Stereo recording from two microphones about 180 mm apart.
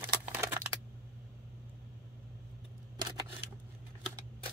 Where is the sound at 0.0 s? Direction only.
10° right (ahead or behind).